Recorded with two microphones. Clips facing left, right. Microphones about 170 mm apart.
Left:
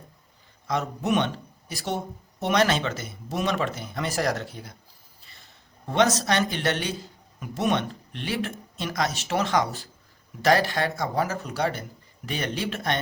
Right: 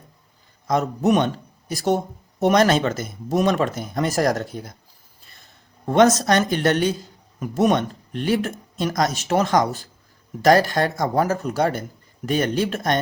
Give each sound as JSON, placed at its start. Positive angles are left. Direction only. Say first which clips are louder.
{"t": 0.7, "sound": "speech", "louder": "right 6 dB", "side_deg": -45}
{"t": 5.8, "sound": "speech", "louder": "right 7 dB", "side_deg": -50}